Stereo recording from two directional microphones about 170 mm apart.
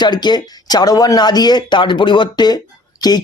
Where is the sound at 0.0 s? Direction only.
25° left (ahead or behind).